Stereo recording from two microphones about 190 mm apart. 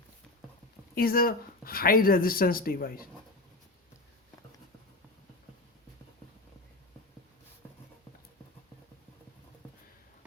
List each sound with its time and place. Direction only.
0.9 s speech: 50° left (ahead or behind)